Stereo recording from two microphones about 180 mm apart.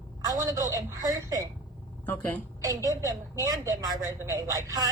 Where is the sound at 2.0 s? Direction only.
10° left (ahead or behind).